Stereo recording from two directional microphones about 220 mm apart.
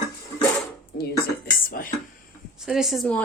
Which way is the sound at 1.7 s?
40° left (ahead or behind).